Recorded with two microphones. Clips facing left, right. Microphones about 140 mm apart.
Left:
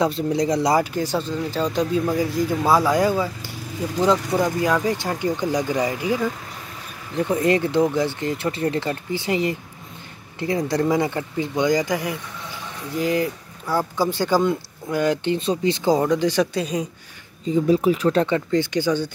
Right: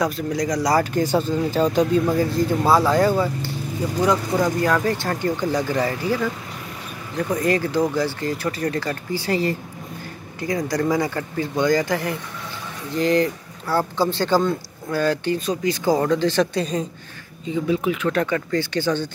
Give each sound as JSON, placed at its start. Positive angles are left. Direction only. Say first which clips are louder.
{"t": 0.0, "sound": "speech", "louder": "left 2 dB", "side_deg": 30}
{"t": 0.9, "sound": "speech", "louder": "right 4 dB", "side_deg": 0}
{"t": 2.7, "sound": "speech", "louder": "right 1 dB", "side_deg": 15}
{"t": 4.0, "sound": "speech", "louder": "left 1 dB", "side_deg": 20}
{"t": 10.7, "sound": "speech", "louder": "left 1 dB", "side_deg": 25}
{"t": 17.5, "sound": "speech", "louder": "left 4 dB", "side_deg": 35}